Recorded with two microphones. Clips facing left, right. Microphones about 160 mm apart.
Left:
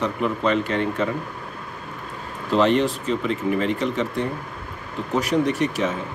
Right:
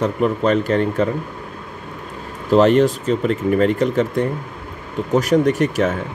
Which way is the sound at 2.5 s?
45° right (ahead or behind).